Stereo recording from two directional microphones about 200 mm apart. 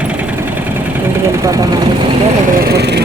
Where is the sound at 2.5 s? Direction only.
50° right (ahead or behind).